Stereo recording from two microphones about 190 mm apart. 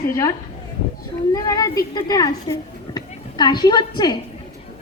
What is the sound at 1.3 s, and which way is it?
A woman's voice, 20° left (ahead or behind).